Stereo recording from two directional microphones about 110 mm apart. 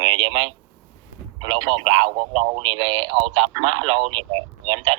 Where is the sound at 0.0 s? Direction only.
50° right (ahead or behind).